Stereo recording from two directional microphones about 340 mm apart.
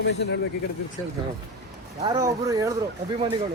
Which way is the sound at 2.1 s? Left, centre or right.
Centre.